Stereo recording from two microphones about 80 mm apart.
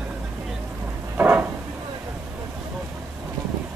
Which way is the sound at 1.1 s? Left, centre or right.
Right.